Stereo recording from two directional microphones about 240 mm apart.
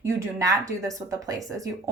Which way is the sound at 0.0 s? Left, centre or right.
Centre.